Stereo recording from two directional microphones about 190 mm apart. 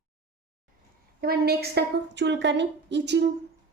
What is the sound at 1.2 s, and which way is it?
A woman's voice, 55° right (ahead or behind).